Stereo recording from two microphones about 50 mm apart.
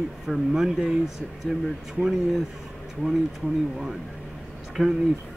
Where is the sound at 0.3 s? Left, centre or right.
Centre.